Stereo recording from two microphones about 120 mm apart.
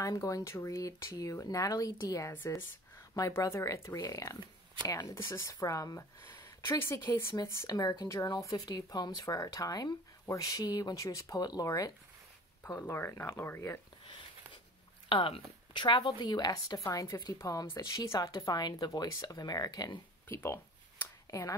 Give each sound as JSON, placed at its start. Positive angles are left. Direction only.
{"t": 0.0, "sound": "speech", "side_deg": 30}
{"t": 15.0, "sound": "speech", "side_deg": 45}
{"t": 20.2, "sound": "a sound", "side_deg": 20}